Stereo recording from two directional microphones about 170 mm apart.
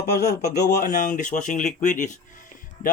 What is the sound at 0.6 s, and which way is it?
Speech, 50° left (ahead or behind).